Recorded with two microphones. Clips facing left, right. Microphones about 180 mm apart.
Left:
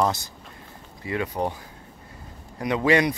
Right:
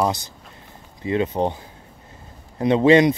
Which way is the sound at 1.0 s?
25° right (ahead or behind).